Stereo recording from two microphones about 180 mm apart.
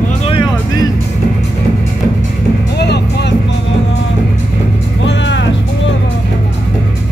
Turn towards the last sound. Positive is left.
turn(degrees=85)